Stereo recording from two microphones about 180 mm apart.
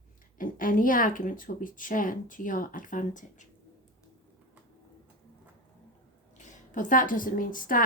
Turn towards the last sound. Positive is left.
turn(degrees=50)  # may be behind; listen again after turning